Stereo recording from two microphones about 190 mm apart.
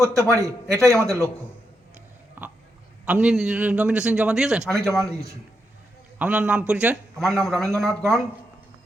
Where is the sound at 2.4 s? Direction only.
10° right (ahead or behind).